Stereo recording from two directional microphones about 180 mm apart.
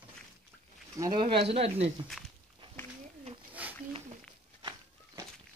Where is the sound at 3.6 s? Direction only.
10° right (ahead or behind).